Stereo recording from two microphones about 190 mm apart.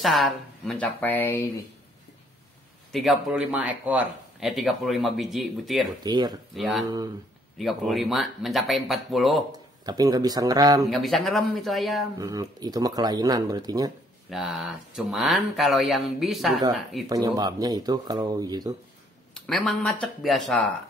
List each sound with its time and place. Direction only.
0.0 s speech: centre (ahead or behind)
2.9 s speech: centre (ahead or behind)
6.0 s speech: 20° right (ahead or behind)
6.5 s speech: centre (ahead or behind)
9.8 s speech: 20° right (ahead or behind)
10.9 s speech: centre (ahead or behind)
12.2 s speech: 20° right (ahead or behind)
14.3 s speech: 5° right (ahead or behind)
17.1 s speech: 20° right (ahead or behind)
19.3 s speech: 5° left (ahead or behind)